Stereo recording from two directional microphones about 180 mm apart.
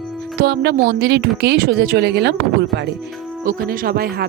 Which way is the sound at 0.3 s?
65° right (ahead or behind).